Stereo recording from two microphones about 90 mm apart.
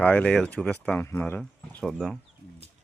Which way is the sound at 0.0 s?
15° left (ahead or behind).